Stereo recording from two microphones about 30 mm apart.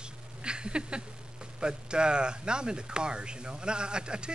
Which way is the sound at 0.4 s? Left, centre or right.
Right.